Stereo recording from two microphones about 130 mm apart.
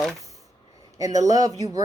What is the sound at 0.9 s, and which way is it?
Speech, 25° right (ahead or behind).